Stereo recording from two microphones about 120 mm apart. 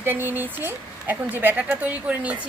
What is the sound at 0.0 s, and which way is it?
Speech, 15° right (ahead or behind).